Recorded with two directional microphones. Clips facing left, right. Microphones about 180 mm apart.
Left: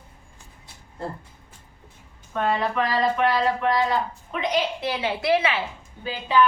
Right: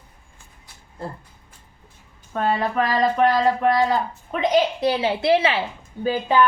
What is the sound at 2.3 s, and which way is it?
Speech, 40° right (ahead or behind).